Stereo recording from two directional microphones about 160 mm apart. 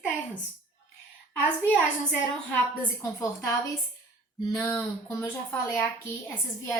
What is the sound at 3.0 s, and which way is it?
Speech, 20° left (ahead or behind).